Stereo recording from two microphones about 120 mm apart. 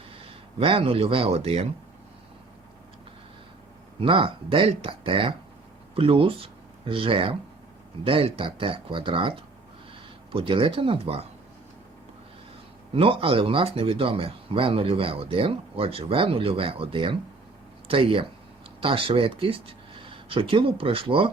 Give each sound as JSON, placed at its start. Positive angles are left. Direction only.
{"t": 0.2, "sound": "speech", "side_deg": -50}
{"t": 4.0, "sound": "speech", "side_deg": -45}
{"t": 12.9, "sound": "speech", "side_deg": -50}